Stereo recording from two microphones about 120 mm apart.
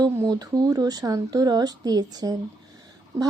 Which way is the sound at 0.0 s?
30° right (ahead or behind).